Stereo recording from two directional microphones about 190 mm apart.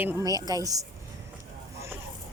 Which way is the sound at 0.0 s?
20° right (ahead or behind).